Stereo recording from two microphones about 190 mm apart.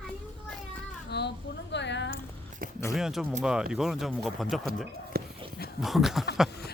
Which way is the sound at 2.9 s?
Centre (ahead or behind).